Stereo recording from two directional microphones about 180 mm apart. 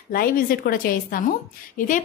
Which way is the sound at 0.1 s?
55° left (ahead or behind).